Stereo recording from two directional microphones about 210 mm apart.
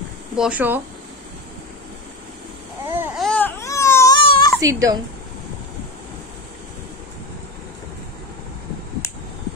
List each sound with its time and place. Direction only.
0.4 s speech: 5° right (ahead or behind)
2.9 s baby cry: 10° right (ahead or behind)
3.3 s baby cry: 10° left (ahead or behind)
4.6 s speech: 15° right (ahead or behind)